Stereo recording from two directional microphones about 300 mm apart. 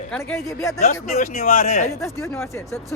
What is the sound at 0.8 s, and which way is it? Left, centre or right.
Speech, left.